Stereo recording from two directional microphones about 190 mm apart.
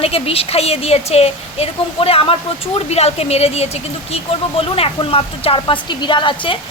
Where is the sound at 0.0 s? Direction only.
30° left (ahead or behind).